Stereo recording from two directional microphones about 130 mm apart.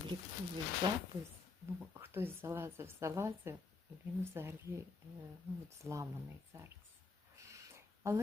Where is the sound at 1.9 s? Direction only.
20° right (ahead or behind).